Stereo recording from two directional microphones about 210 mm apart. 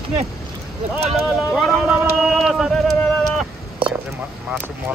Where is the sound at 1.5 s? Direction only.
Centre (ahead or behind).